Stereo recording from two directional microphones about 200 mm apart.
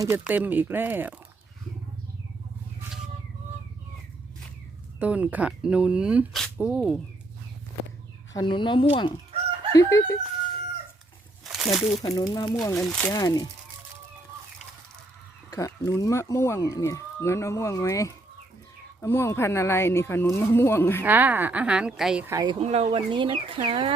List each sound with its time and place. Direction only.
0.0 s speech: 10° right (ahead or behind)
4.9 s speech: 5° right (ahead or behind)
8.3 s speech: 20° left (ahead or behind)
11.4 s speech: centre (ahead or behind)
12.0 s speech: 20° left (ahead or behind)
12.7 s speech: centre (ahead or behind)
13.1 s speech: 20° left (ahead or behind)
15.4 s speech: 15° left (ahead or behind)
21.0 s speech: 10° right (ahead or behind)
22.5 s speech: 30° right (ahead or behind)